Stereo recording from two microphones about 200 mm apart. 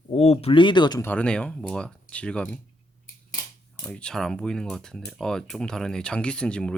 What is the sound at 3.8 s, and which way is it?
Speech, 5° left (ahead or behind).